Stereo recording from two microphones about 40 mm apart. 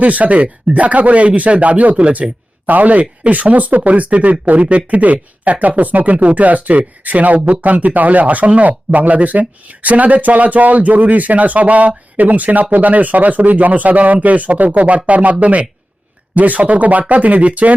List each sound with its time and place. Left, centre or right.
0.0 s speech: right
2.6 s speech: right